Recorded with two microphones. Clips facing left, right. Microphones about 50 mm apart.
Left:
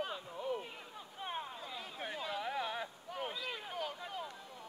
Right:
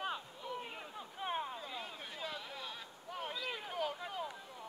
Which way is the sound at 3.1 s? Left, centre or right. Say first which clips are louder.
Right 1 dB; centre.